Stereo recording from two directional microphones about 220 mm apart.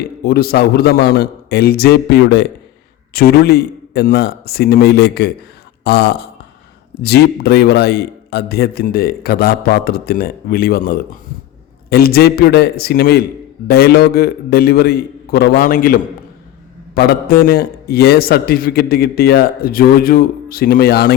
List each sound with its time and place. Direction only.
0.3 s a man's voice: 45° left (ahead or behind)